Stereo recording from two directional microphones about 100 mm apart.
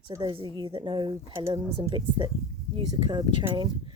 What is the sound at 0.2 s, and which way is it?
Speech, 45° right (ahead or behind).